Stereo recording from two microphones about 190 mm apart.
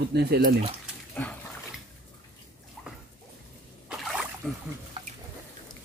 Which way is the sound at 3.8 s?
Centre (ahead or behind).